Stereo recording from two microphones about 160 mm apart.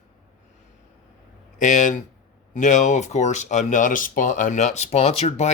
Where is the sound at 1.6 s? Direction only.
50° left (ahead or behind).